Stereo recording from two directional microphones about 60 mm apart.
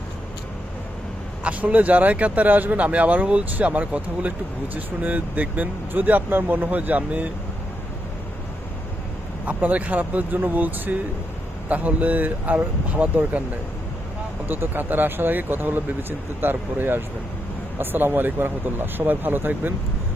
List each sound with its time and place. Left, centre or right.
1.5 s speech: right
9.5 s speech: right
14.4 s speech: right